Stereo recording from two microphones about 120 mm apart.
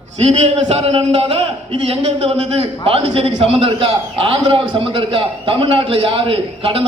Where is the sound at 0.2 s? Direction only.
60° right (ahead or behind).